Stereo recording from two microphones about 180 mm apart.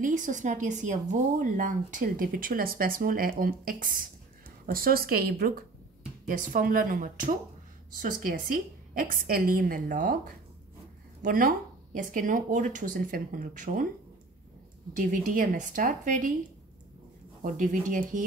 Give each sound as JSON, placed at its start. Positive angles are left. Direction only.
{"t": 0.0, "sound": "a woman's voice", "side_deg": -45}
{"t": 15.0, "sound": "a woman's voice", "side_deg": -50}
{"t": 17.4, "sound": "a woman's voice", "side_deg": -45}